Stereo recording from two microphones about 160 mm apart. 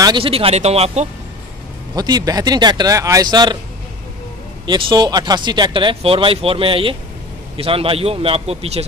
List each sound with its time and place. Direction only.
0.0 s speech: 30° right (ahead or behind)
2.0 s speech: 25° right (ahead or behind)
4.6 s speech: 30° right (ahead or behind)